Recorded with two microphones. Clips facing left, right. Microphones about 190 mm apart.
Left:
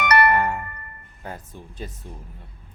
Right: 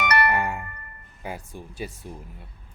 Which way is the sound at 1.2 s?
10° right (ahead or behind).